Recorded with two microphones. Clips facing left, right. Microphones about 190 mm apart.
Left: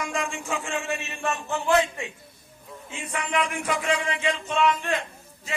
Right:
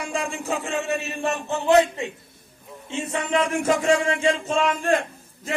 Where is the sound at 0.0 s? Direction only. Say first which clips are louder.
Right 2 dB; 35° right (ahead or behind).